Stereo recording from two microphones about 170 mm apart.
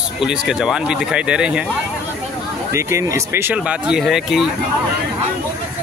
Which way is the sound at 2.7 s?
15° right (ahead or behind).